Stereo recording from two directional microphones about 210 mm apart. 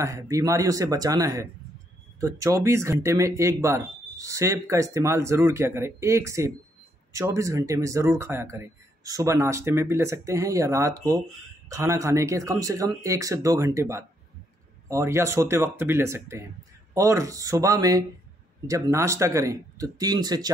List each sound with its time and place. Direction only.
0.0 s speech: 15° right (ahead or behind)